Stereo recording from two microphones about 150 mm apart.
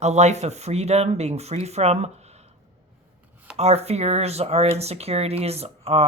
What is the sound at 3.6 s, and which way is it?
Speech, 45° right (ahead or behind).